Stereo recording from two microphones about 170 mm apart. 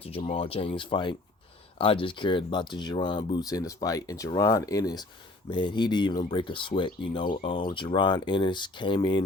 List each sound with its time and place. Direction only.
0.0 s speech: 35° left (ahead or behind)